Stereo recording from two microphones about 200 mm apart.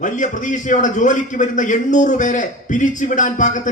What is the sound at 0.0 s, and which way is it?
A man's voice, 40° left (ahead or behind).